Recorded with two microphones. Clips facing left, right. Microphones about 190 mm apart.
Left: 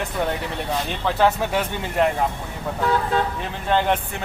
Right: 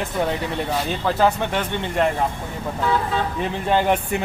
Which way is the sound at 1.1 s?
Centre (ahead or behind).